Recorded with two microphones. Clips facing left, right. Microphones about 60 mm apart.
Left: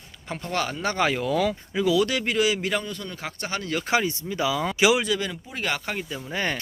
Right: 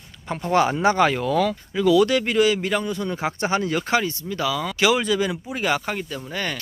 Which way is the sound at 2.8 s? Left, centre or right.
Centre.